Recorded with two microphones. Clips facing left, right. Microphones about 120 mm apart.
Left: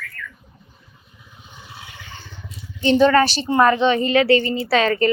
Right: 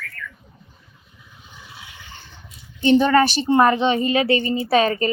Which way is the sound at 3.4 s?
25° right (ahead or behind).